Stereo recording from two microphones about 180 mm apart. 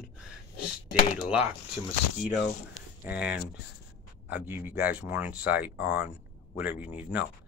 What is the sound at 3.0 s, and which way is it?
Speech, 10° right (ahead or behind).